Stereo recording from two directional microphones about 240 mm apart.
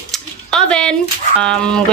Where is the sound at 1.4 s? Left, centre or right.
Centre.